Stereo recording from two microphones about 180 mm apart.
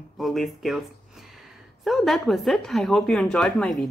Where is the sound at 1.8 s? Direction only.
Centre (ahead or behind).